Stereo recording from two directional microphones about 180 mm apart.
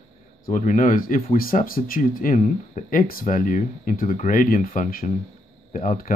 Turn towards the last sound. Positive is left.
turn(degrees=45)  # may be behind; listen again after turning